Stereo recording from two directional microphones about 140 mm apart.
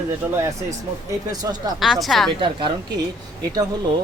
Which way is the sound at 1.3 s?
30° right (ahead or behind).